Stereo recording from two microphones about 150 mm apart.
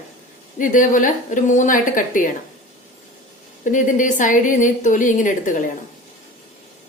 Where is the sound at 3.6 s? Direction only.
60° left (ahead or behind).